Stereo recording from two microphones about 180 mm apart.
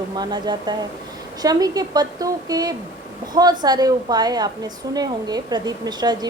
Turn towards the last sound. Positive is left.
turn(degrees=-20)  # may be behind; listen again after turning